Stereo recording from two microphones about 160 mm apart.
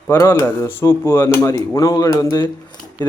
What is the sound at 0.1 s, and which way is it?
Speech, 15° left (ahead or behind).